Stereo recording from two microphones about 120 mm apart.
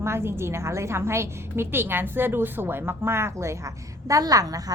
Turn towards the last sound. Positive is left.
turn(degrees=-30)  # may be behind; listen again after turning